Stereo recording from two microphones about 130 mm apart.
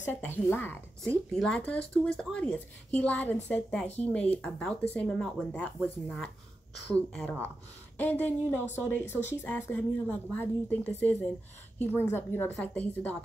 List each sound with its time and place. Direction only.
0.1 s speech: 15° left (ahead or behind)